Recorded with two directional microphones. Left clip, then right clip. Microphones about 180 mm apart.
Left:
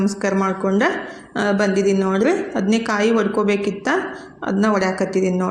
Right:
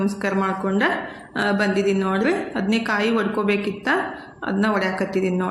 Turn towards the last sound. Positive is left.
turn(degrees=15)  # may be behind; listen again after turning